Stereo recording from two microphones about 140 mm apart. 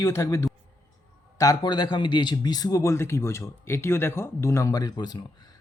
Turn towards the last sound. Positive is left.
turn(degrees=30)  # may be behind; listen again after turning